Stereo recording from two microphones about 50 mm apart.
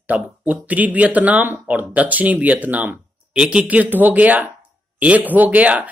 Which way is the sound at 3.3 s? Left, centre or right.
Centre.